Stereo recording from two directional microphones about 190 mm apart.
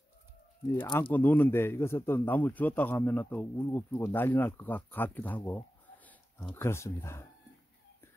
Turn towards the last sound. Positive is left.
turn(degrees=15)  # may be behind; listen again after turning